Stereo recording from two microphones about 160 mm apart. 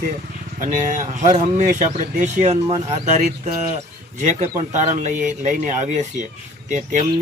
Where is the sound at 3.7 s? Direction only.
45° right (ahead or behind).